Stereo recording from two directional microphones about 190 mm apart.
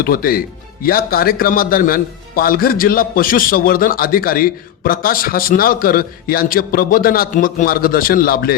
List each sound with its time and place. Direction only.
0.0 s speech: 50° left (ahead or behind)